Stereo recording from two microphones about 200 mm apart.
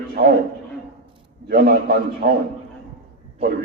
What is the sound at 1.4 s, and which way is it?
Speech, 50° right (ahead or behind).